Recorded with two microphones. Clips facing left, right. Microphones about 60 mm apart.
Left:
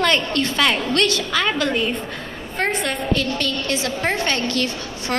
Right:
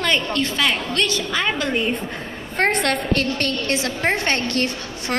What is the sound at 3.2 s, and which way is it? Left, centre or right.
A woman's voice, right.